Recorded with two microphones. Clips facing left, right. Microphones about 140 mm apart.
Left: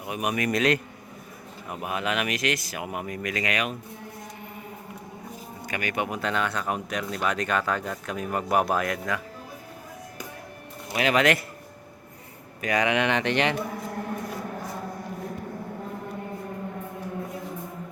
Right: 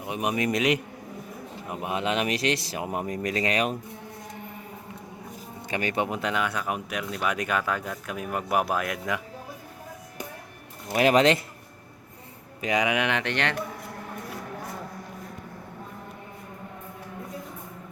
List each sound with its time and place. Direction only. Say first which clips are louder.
0.0 s a man's voice: right 1 dB; 25° right (ahead or behind)
5.6 s speech: right 2 dB; 30° right (ahead or behind); by 9.0 s 5° right (ahead or behind)
10.9 s speech: right 3 dB; 40° right (ahead or behind)
12.6 s speech: left 1 dB; 15° right (ahead or behind); by 13.6 s 5° left (ahead or behind)